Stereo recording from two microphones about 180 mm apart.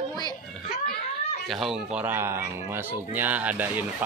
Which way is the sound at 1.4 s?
Centre (ahead or behind).